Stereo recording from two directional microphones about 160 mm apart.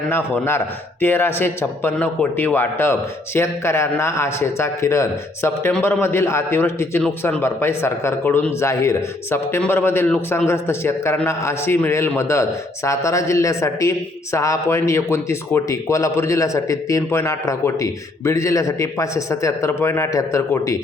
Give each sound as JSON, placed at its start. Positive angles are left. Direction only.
{"t": 0.1, "sound": "a man's voice", "side_deg": 15}